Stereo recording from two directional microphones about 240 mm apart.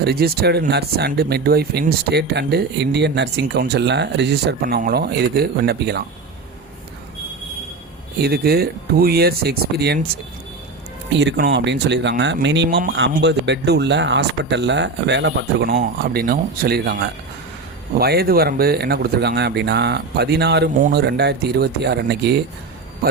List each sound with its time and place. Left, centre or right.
0.0 s speech: right
8.2 s speech: right
11.1 s speech: right